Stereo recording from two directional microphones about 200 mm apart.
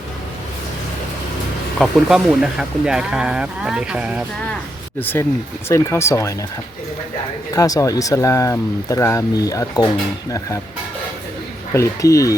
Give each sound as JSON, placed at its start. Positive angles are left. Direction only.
{"t": 1.8, "sound": "speech", "side_deg": 0}
{"t": 4.9, "sound": "speech", "side_deg": 10}
{"t": 7.5, "sound": "speech", "side_deg": 15}
{"t": 11.7, "sound": "speech", "side_deg": 15}